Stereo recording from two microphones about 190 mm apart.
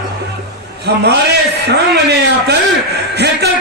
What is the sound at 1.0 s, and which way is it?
Music, 60° right (ahead or behind).